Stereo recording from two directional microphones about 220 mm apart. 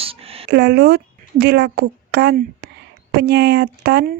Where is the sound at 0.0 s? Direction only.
25° right (ahead or behind).